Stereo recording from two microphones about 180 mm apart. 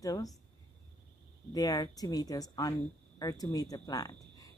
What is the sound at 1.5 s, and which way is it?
A woman's voice, 20° left (ahead or behind).